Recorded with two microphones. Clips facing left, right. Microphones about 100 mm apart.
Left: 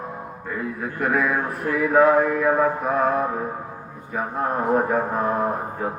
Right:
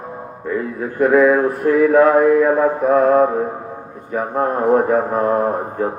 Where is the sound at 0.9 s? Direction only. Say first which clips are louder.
Right 10 dB; 35° right (ahead or behind).